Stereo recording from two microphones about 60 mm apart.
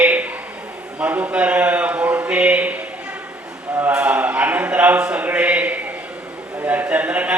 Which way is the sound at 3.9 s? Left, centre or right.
Right.